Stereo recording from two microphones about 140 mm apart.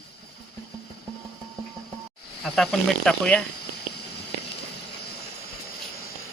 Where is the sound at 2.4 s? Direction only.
5° left (ahead or behind).